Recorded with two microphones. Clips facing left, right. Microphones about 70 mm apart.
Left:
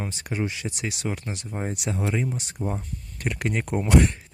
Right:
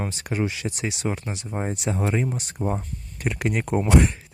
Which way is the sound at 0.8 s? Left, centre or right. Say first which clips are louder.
Right 3 dB; right.